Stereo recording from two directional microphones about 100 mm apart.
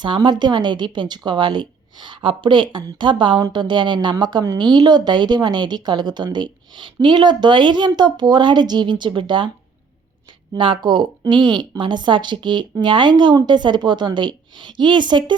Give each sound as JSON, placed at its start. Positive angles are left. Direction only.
{"t": 0.0, "sound": "speech", "side_deg": -50}
{"t": 10.5, "sound": "speech", "side_deg": -55}